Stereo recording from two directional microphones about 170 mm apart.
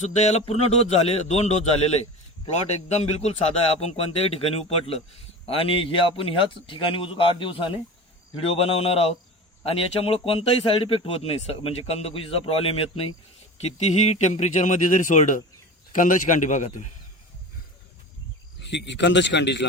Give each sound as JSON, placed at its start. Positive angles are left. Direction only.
{"t": 0.0, "sound": "speech", "side_deg": 40}
{"t": 18.6, "sound": "a man's voice", "side_deg": 90}